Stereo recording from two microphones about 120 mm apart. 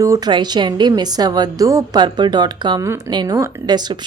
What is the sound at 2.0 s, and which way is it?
A woman's voice, 40° right (ahead or behind).